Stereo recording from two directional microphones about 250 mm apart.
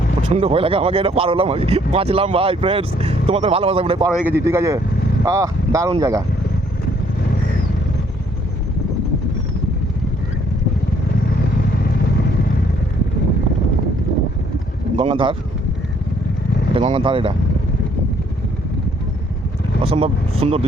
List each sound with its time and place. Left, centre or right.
0.2 s speech: right
4.3 s speech: centre
14.9 s speech: right
16.7 s speech: right
19.8 s speech: right